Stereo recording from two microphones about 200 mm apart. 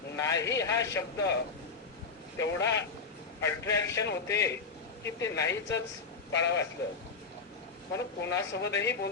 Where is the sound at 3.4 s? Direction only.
15° left (ahead or behind).